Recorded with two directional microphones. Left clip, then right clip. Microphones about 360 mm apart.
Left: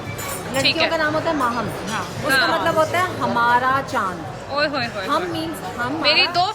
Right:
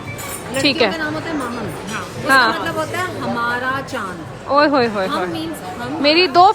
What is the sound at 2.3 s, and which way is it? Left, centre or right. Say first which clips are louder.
Speech: right 5 dB; centre.